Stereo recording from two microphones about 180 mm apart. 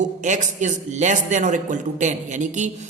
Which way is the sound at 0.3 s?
40° right (ahead or behind).